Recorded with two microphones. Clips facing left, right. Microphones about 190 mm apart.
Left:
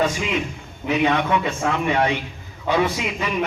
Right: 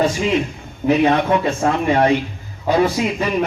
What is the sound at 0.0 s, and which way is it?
A man's voice, 35° right (ahead or behind).